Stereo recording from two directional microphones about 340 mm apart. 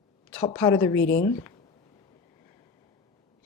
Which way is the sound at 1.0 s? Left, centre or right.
Left.